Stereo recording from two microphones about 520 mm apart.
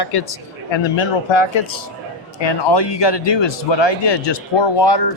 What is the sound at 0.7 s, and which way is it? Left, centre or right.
A man's voice, left.